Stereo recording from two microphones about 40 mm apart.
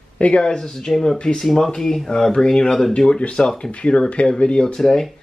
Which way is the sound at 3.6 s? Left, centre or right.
Left.